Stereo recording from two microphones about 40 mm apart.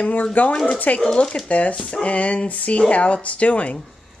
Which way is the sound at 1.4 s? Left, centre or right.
Left.